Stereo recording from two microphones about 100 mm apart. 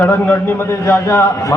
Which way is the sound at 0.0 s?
25° left (ahead or behind).